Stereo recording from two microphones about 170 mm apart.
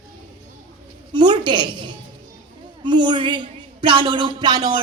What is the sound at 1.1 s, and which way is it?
A woman's voice, 25° right (ahead or behind).